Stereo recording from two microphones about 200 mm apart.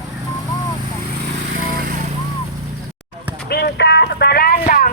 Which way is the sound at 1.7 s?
45° right (ahead or behind).